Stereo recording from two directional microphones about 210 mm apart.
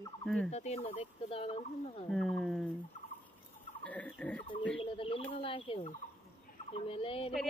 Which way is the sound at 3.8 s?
5° left (ahead or behind).